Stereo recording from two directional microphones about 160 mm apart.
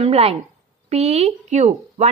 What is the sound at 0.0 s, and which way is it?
A woman's voice, 40° right (ahead or behind).